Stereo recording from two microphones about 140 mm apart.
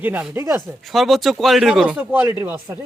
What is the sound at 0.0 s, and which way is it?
Speech, 10° right (ahead or behind).